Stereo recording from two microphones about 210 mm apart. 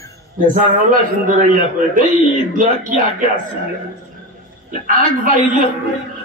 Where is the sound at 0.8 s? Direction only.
40° right (ahead or behind).